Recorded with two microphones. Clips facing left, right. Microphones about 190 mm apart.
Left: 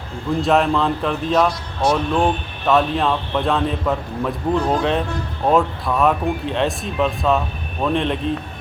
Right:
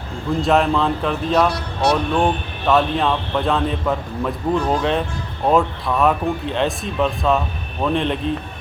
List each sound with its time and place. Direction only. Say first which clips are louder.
0.4 s a man's voice: even; centre (ahead or behind)
1.8 s speech: even; 70° right (ahead or behind)
2.1 s a man's voice: even; centre (ahead or behind)